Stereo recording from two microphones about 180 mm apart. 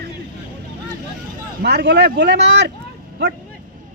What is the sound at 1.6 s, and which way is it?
Speech, 65° right (ahead or behind).